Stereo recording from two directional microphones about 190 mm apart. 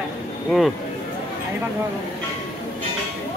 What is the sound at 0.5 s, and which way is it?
Speech, centre (ahead or behind).